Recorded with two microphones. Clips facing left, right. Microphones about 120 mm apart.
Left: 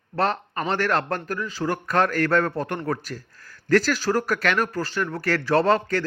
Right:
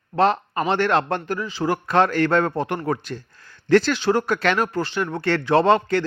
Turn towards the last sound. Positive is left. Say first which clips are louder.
# right 3 dB
turn(degrees=-25)  # may be behind; listen again after turning